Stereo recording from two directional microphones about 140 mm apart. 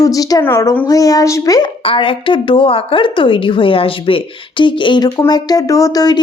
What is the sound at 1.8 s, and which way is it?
A woman's voice, 40° left (ahead or behind).